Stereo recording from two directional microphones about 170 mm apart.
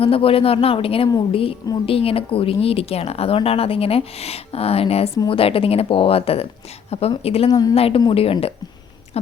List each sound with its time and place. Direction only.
0.0 s speech: 35° left (ahead or behind)
9.2 s owl: 40° left (ahead or behind)